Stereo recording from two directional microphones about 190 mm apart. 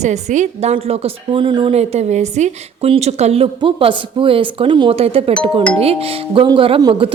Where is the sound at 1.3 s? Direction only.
25° right (ahead or behind).